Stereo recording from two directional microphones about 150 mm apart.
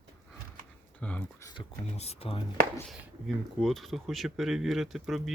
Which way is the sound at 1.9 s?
45° left (ahead or behind).